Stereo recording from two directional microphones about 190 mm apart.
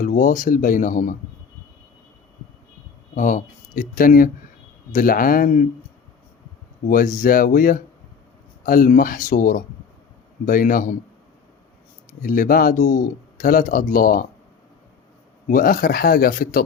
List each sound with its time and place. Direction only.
0.0 s speech: 45° left (ahead or behind)
3.2 s speech: 45° left (ahead or behind)
6.8 s speech: 45° left (ahead or behind)
12.2 s speech: 50° left (ahead or behind)
15.4 s speech: 50° left (ahead or behind)